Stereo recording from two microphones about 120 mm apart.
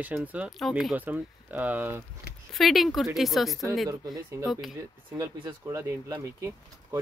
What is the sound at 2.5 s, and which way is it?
Speech, centre (ahead or behind).